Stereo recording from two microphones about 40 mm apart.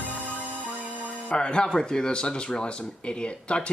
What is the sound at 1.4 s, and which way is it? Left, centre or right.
A man's voice, left.